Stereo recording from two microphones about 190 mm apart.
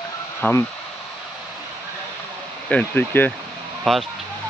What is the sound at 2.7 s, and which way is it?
Speech, 10° left (ahead or behind).